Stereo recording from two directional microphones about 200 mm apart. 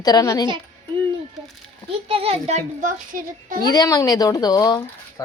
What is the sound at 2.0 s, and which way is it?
Speech, 30° right (ahead or behind).